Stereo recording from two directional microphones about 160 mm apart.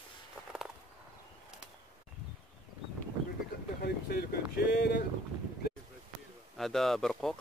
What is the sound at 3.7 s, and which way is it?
Vehicle, 70° left (ahead or behind).